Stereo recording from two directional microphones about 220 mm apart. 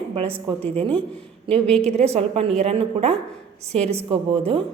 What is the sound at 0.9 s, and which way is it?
Speech, 5° left (ahead or behind).